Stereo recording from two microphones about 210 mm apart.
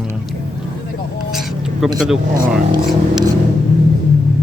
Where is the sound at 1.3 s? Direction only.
Centre (ahead or behind).